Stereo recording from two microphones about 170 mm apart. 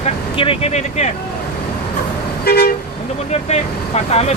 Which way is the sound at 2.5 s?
60° left (ahead or behind).